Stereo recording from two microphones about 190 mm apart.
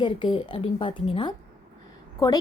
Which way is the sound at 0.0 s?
25° left (ahead or behind).